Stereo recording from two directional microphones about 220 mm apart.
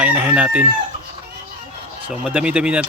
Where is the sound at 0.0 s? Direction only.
5° right (ahead or behind).